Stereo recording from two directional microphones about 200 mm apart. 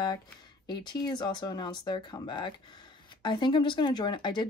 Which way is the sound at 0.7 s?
20° left (ahead or behind).